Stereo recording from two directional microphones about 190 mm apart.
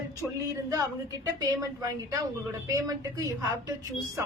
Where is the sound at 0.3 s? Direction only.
15° right (ahead or behind).